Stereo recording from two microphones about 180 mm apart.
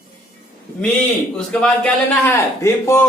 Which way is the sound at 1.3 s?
5° left (ahead or behind).